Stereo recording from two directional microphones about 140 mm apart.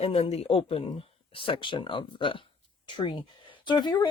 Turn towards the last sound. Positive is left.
turn(degrees=30)  # may be behind; listen again after turning